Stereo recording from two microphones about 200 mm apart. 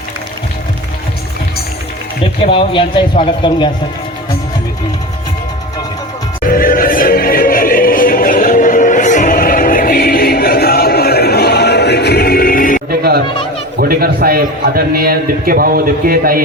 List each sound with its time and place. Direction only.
2.4 s speech: 25° left (ahead or behind)
6.4 s music: 45° left (ahead or behind)
12.9 s music: 50° right (ahead or behind)
13.7 s a man's voice: 50° right (ahead or behind)